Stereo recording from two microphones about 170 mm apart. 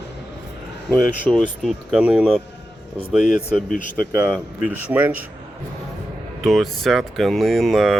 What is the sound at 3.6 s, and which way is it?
Speech, 50° left (ahead or behind).